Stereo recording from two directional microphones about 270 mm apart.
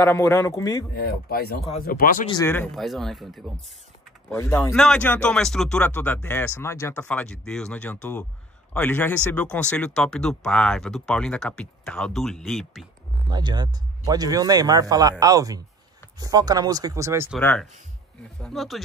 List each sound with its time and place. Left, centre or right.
0.0 s speech: centre
0.9 s speech: left
2.3 s speech: centre
13.3 s speech: centre
17.4 s speech: centre